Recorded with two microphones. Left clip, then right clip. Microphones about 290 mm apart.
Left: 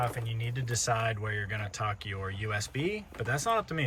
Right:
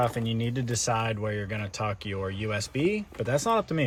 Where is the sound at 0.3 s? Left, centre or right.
Centre.